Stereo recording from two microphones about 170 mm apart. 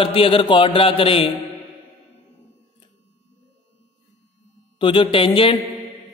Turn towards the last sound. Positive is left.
turn(degrees=30)  # may be behind; listen again after turning